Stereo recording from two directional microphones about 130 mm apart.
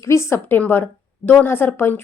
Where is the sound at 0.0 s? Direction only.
20° left (ahead or behind).